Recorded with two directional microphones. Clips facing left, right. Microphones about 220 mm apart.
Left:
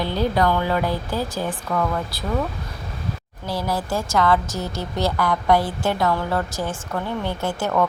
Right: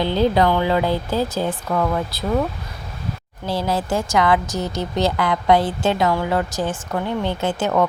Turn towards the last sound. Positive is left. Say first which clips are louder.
# right 3 dB
turn(degrees=-20)  # may be behind; listen again after turning